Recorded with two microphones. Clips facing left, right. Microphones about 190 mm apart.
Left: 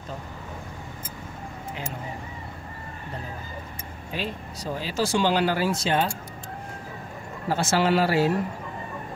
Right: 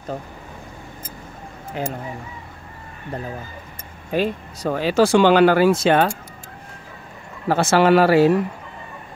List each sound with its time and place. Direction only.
1.8 s speech: 45° right (ahead or behind)
4.1 s speech: 55° right (ahead or behind)
7.4 s speech: 65° right (ahead or behind)